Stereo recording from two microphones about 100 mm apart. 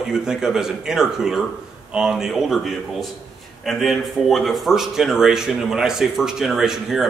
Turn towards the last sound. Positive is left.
turn(degrees=-5)  # may be behind; listen again after turning